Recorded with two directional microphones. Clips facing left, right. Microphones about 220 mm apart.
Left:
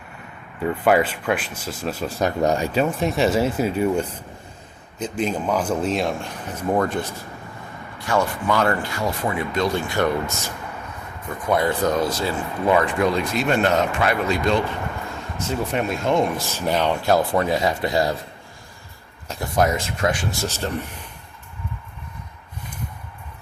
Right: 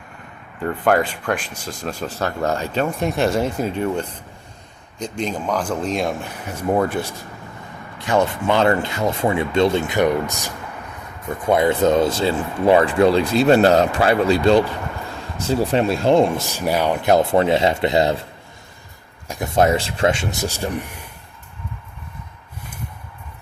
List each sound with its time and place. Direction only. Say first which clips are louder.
0.6 s speech: even; 5° left (ahead or behind)
2.8 s a man's voice: right 3 dB; centre (ahead or behind)
7.9 s speech: right 3 dB; 20° right (ahead or behind)
16.4 s speech: right 2 dB; 15° right (ahead or behind)
19.5 s speech: right 4 dB; 30° right (ahead or behind); by 21.1 s 10° right (ahead or behind)